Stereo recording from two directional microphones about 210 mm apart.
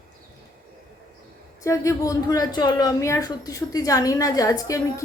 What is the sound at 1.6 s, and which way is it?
A woman's voice, 15° left (ahead or behind).